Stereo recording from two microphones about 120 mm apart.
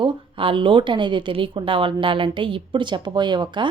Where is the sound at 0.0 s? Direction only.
45° right (ahead or behind).